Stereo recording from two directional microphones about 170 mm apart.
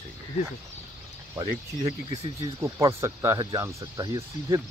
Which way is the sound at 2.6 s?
15° right (ahead or behind).